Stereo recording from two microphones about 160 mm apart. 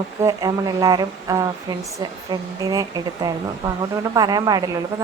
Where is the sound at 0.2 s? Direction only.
20° right (ahead or behind).